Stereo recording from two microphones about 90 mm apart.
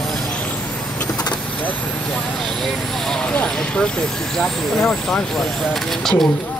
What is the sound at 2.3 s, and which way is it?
Speech, 5° left (ahead or behind).